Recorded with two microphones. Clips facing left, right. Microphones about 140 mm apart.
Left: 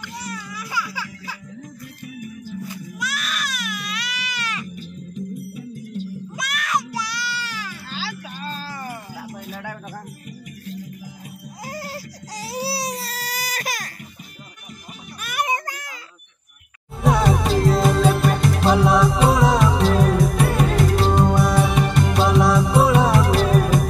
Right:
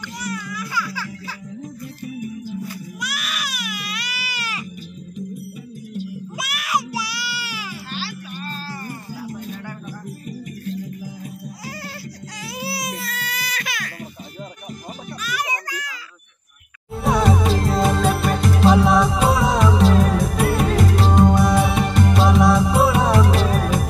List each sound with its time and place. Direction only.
0.2 s music: 25° left (ahead or behind)
3.0 s baby cry: centre (ahead or behind)
5.9 s music: 5° right (ahead or behind)
12.5 s music: 35° left (ahead or behind)
15.2 s music: 50° left (ahead or behind)
17.0 s music: centre (ahead or behind)